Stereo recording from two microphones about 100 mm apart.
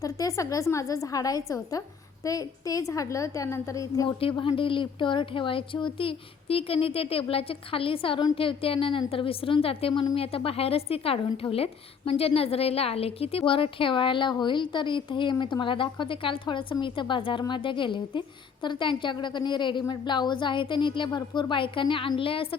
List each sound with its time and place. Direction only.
0.0 s a woman's voice: 35° left (ahead or behind)
4.2 s a woman's voice: 60° left (ahead or behind)